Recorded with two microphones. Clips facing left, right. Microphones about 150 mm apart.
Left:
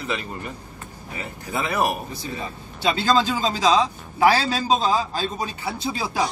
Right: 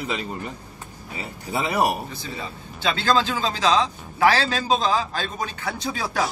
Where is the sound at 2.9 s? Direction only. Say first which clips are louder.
Left 1 dB; 10° left (ahead or behind).